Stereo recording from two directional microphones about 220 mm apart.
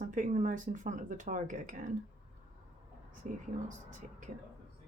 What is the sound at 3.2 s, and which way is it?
Speech, 35° right (ahead or behind).